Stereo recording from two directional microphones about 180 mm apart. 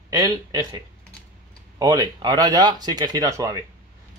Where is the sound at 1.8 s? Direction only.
20° right (ahead or behind).